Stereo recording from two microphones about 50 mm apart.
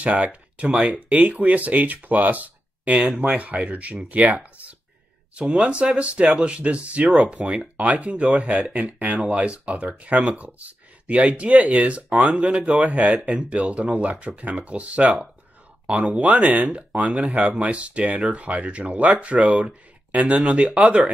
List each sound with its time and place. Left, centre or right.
0.0 s speech: right
16.3 s speech: right